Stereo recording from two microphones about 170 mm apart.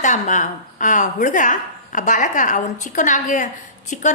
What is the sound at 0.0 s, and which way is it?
Speech, 45° left (ahead or behind).